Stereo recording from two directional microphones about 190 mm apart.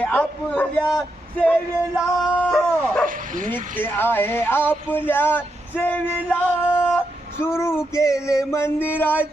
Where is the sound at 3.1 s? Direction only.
45° right (ahead or behind).